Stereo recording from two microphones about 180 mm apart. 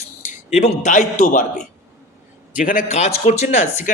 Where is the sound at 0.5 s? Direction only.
40° left (ahead or behind).